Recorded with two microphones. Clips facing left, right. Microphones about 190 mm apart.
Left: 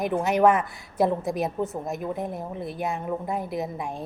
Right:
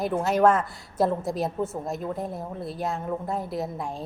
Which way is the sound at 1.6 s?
15° left (ahead or behind).